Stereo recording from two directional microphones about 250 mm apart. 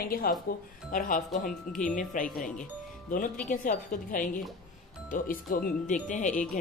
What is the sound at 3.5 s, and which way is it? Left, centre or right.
Speech, left.